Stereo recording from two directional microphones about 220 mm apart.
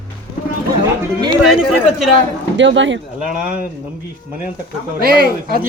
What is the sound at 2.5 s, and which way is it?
Speech, 55° right (ahead or behind).